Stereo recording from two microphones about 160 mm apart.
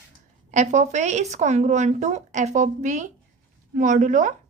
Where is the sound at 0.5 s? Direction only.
50° right (ahead or behind).